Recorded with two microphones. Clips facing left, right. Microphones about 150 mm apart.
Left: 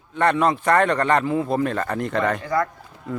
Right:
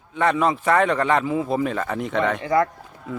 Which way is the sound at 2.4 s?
20° right (ahead or behind).